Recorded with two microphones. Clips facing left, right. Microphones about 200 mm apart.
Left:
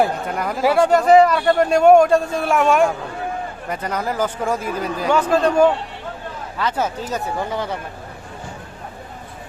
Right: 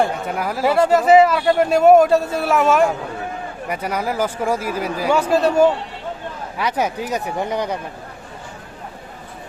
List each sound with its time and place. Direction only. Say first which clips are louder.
0.0 s speech: even; 5° right (ahead or behind)